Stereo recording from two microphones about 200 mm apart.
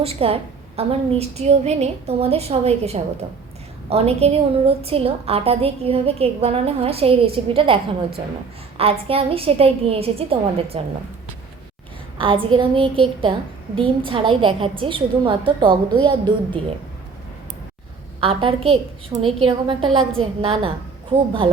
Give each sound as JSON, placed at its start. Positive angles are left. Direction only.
{"t": 0.0, "sound": "a woman's voice", "side_deg": -30}
{"t": 8.8, "sound": "a woman's voice", "side_deg": -30}
{"t": 12.1, "sound": "a woman's voice", "side_deg": -25}
{"t": 18.2, "sound": "a woman's voice", "side_deg": -25}